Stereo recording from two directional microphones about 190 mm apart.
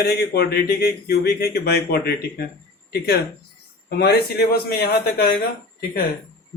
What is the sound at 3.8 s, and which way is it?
Speech, 60° left (ahead or behind).